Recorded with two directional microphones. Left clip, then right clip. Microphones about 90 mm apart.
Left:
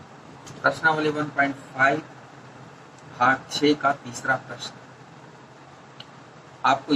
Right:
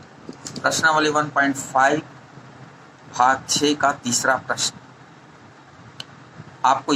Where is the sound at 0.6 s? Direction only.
30° right (ahead or behind).